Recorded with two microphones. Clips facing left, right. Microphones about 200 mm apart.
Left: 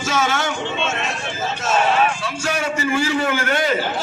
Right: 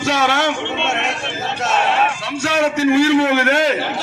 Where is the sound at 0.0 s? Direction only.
70° right (ahead or behind).